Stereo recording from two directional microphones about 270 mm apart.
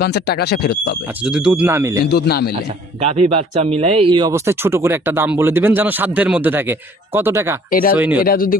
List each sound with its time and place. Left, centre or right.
0.0 s speech: left
1.2 s speech: centre
2.0 s speech: left
3.0 s speech: right; by 8.2 s centre
8.2 s speech: left